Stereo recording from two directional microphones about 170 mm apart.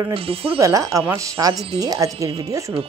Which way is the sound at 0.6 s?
20° right (ahead or behind).